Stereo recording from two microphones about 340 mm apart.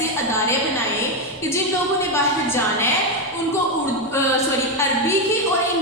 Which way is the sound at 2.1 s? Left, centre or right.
Centre.